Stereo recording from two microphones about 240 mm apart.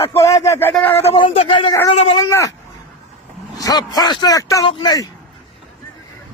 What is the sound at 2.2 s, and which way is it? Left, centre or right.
Speech, centre.